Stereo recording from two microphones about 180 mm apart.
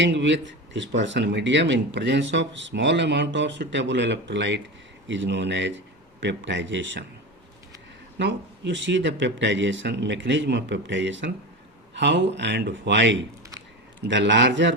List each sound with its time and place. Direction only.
0.0 s speech: 90° right
8.2 s speech: 85° right
11.9 s speech: 75° right (ahead or behind)